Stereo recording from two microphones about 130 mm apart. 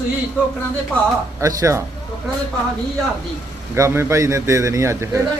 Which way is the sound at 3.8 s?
20° right (ahead or behind).